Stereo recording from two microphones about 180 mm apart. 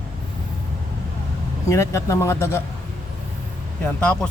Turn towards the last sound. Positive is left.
turn(degrees=5)  # may be behind; listen again after turning